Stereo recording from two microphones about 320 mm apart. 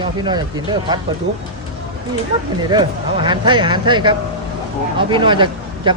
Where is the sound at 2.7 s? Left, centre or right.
Centre.